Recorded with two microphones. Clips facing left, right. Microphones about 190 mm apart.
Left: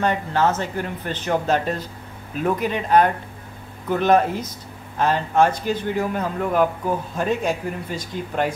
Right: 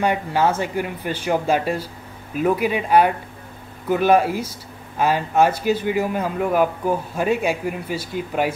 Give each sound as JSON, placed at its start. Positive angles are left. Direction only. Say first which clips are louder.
{"t": 0.0, "sound": "speech", "louder": "right 1 dB", "side_deg": -10}